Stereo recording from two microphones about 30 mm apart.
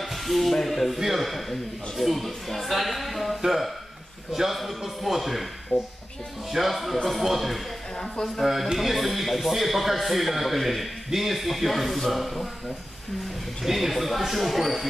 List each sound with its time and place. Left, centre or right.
0.0 s speech: centre
0.9 s a man's voice: centre
5.7 s speech: left
6.5 s a man's voice: centre
13.7 s speech: centre